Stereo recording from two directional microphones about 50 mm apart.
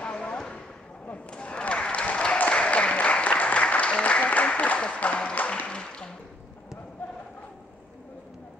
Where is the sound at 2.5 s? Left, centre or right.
Left.